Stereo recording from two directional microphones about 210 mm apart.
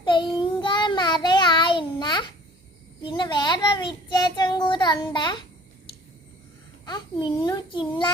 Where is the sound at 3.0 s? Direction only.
20° left (ahead or behind).